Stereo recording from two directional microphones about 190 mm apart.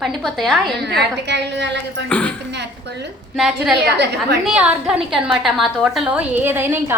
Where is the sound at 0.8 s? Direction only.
65° right (ahead or behind).